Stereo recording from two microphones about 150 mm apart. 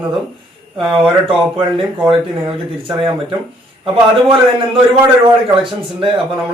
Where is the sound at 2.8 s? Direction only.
35° right (ahead or behind).